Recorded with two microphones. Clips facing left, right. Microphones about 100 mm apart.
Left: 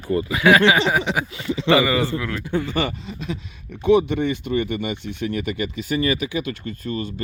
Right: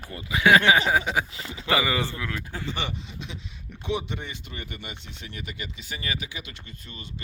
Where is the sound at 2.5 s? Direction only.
50° left (ahead or behind).